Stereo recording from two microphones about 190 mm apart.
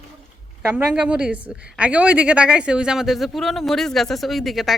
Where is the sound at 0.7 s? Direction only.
5° right (ahead or behind).